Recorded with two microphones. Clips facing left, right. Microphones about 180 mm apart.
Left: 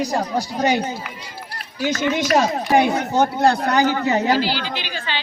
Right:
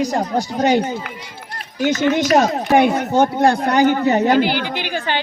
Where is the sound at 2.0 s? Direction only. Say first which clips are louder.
Right 3 dB; 55° right (ahead or behind).